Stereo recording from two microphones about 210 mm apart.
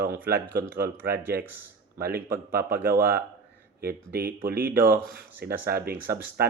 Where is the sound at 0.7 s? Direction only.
45° right (ahead or behind).